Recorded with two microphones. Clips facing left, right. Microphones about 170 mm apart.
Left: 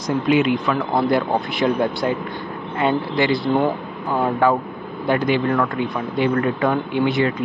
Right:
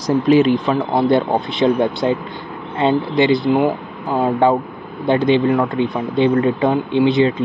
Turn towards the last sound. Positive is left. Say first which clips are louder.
# right 5 dB
turn(degrees=-20)  # may be behind; listen again after turning